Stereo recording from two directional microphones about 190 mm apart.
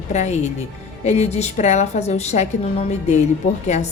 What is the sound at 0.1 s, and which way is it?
A woman's voice, 35° left (ahead or behind).